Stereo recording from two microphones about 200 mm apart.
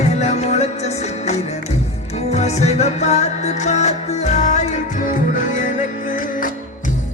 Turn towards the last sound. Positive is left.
turn(degrees=40)  # may be behind; listen again after turning